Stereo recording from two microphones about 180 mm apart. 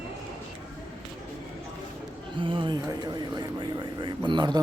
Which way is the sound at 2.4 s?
30° right (ahead or behind).